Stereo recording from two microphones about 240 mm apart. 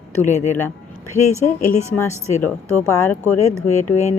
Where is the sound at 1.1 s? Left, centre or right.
Centre.